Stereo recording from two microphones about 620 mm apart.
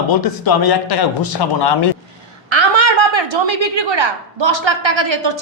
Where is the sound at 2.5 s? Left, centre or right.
Right.